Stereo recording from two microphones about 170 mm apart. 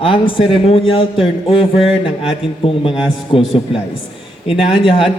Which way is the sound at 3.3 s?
35° left (ahead or behind).